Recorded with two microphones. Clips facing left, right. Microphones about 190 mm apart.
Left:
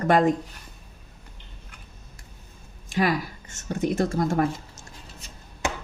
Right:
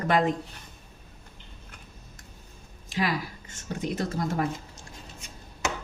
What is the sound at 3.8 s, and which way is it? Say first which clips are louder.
Speech: left 6 dB; 45° left (ahead or behind).